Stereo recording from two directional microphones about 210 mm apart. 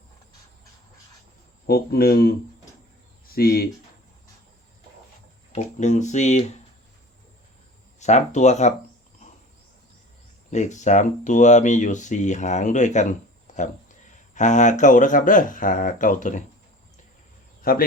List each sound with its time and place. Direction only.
1.6 s speech: 45° left (ahead or behind)
3.3 s speech: 45° left (ahead or behind)
5.5 s speech: 35° left (ahead or behind)
7.9 s speech: 35° left (ahead or behind)
10.5 s speech: 35° left (ahead or behind)
13.5 s a sound: 35° left (ahead or behind)
14.3 s speech: 35° left (ahead or behind)
17.6 s speech: 45° left (ahead or behind)